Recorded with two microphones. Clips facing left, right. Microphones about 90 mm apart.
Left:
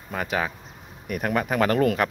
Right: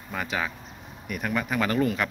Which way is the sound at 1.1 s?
45° left (ahead or behind).